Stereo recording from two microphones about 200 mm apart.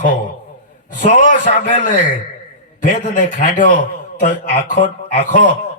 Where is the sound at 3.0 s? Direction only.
40° left (ahead or behind).